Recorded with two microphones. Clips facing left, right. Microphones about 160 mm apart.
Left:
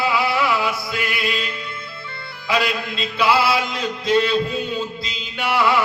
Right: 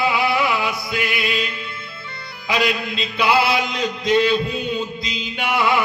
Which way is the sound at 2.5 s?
15° right (ahead or behind).